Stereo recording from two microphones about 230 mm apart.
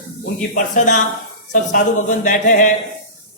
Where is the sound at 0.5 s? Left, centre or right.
Left.